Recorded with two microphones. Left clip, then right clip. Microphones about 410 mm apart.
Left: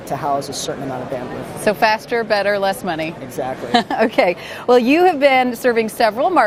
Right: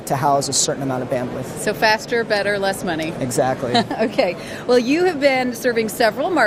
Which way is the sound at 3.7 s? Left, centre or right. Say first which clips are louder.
Left 6 dB; left.